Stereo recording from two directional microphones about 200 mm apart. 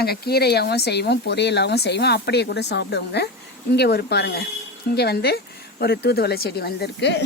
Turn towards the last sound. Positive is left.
turn(degrees=60)  # may be behind; listen again after turning